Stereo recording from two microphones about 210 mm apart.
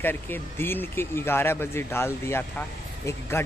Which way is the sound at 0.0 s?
10° left (ahead or behind).